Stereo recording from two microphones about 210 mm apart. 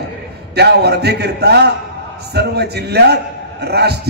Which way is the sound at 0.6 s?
50° right (ahead or behind).